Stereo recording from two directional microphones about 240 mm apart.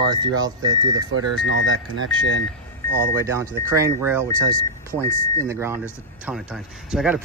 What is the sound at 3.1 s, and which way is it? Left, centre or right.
Speech, centre.